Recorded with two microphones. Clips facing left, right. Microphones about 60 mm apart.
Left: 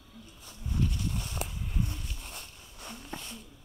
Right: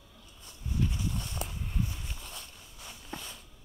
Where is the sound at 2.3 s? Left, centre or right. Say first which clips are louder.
Left 1 dB; left.